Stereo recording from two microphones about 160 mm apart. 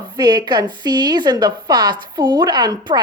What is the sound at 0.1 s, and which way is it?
Speech, 25° right (ahead or behind).